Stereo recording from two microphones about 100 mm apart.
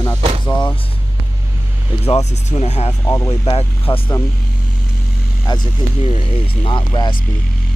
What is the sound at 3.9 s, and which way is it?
Speech, 20° left (ahead or behind).